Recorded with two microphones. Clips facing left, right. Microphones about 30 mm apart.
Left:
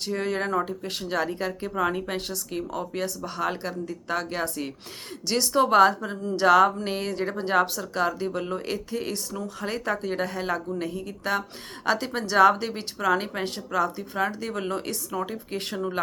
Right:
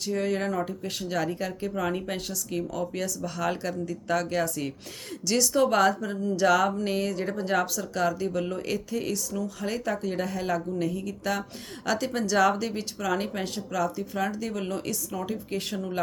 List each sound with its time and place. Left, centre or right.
0.1 s speech: left
0.9 s speech: left
2.5 s speech: left
6.2 s speech: left
13.4 s speech: left
15.1 s speech: left
15.5 s speech: left